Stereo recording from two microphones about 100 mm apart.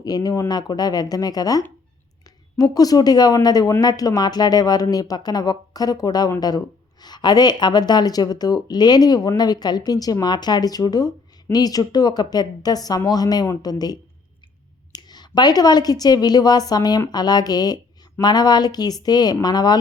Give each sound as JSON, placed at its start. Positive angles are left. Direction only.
{"t": 0.0, "sound": "speech", "side_deg": 40}
{"t": 2.7, "sound": "a woman's voice", "side_deg": 40}